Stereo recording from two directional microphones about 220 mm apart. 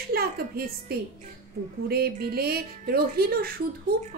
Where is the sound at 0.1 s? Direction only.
45° right (ahead or behind).